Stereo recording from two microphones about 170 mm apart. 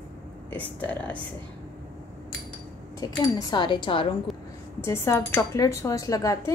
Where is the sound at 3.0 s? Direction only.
20° left (ahead or behind).